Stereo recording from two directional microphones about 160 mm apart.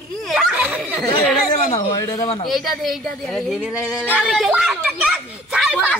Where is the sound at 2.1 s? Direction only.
20° left (ahead or behind).